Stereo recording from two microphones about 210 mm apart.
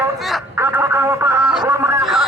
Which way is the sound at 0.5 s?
10° right (ahead or behind).